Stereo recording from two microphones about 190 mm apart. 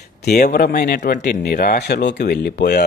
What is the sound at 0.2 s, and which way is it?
Speech, 55° left (ahead or behind).